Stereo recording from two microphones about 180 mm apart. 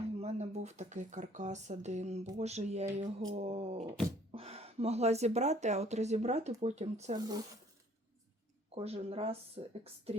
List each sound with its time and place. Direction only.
0.2 s speech: 40° right (ahead or behind)
7.2 s speech: 20° right (ahead or behind)
8.7 s speech: 35° right (ahead or behind)